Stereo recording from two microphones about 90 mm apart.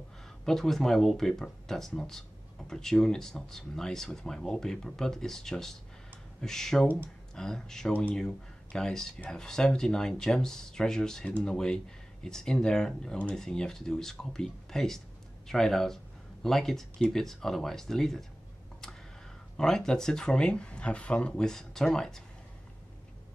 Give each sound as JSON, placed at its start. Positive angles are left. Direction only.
{"t": 0.5, "sound": "speech", "side_deg": 5}
{"t": 19.5, "sound": "speech", "side_deg": 5}